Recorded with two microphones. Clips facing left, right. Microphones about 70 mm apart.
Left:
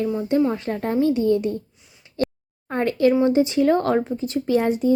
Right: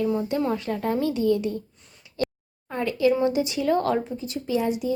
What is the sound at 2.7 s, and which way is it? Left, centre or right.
Speech, left.